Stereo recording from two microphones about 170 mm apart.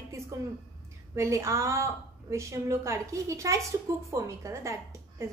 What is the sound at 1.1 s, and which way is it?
A woman's voice, 15° right (ahead or behind).